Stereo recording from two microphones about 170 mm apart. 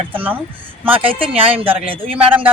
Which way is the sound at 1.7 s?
30° right (ahead or behind).